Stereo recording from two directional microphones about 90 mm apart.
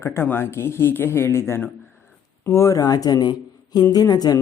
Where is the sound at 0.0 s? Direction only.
30° left (ahead or behind).